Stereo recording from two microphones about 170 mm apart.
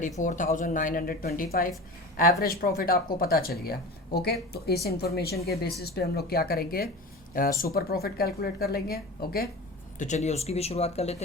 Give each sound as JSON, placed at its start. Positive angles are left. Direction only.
{"t": 0.2, "sound": "speech", "side_deg": 50}
{"t": 10.0, "sound": "speech", "side_deg": 45}